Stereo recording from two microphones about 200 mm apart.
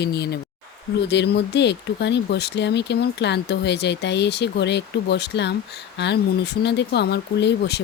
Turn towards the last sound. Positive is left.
turn(degrees=55)  # may be behind; listen again after turning